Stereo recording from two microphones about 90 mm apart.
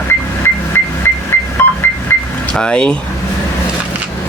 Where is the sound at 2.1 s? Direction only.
20° left (ahead or behind).